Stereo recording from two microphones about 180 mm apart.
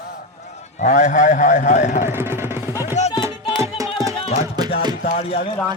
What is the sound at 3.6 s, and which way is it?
Music, 20° right (ahead or behind).